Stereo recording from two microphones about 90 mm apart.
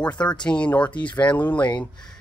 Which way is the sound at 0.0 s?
10° left (ahead or behind).